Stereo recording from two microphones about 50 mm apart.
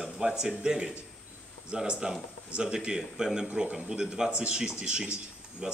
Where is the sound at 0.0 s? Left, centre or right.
Centre.